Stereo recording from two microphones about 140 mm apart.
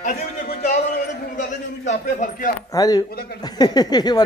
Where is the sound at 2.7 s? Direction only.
25° left (ahead or behind).